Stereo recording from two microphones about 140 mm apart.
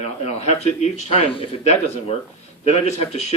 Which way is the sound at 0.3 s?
50° left (ahead or behind).